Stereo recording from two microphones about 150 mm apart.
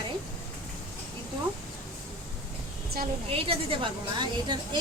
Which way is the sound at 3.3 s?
40° right (ahead or behind).